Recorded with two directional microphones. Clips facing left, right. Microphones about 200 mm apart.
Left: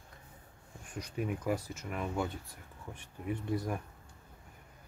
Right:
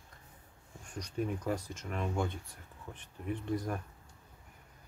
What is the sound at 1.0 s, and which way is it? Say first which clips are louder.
Speech: right 1 dB; 10° left (ahead or behind).